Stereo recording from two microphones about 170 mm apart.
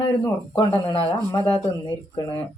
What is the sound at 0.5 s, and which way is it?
Speech, 30° left (ahead or behind).